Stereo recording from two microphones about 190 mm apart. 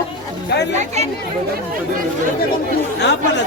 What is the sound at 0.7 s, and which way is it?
Speech, 40° right (ahead or behind).